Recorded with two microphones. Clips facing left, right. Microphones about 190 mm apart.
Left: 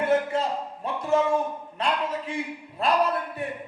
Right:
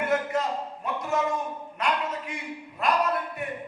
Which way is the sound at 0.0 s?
30° left (ahead or behind).